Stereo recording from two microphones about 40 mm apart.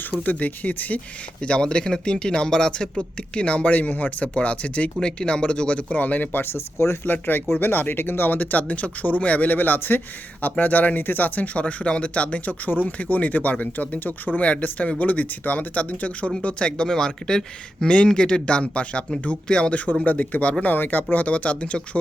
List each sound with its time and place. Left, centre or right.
0.0 s speech: left
1.4 s speech: left
3.8 s speech: left
6.4 s speech: left
7.0 s speech: left
8.4 s speech: left
10.6 s speech: left
12.6 s speech: left
19.7 s speech: left